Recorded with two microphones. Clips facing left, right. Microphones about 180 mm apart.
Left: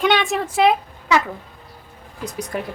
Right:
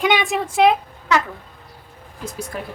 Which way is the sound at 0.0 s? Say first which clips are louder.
Left 1 dB; 10° right (ahead or behind).